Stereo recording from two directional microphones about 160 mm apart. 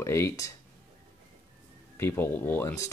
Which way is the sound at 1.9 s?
15° left (ahead or behind).